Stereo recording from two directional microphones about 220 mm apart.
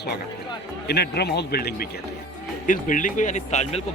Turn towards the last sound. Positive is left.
turn(degrees=30)  # may be behind; listen again after turning